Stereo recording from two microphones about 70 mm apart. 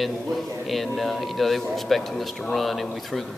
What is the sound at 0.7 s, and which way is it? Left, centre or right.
Speech, centre.